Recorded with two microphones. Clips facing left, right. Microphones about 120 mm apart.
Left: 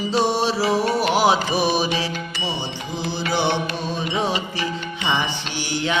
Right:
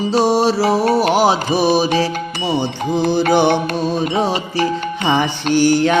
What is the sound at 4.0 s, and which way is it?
Music, 35° right (ahead or behind).